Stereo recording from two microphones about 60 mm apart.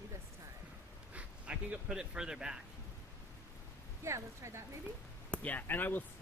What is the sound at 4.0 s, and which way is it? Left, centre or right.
Speech, right.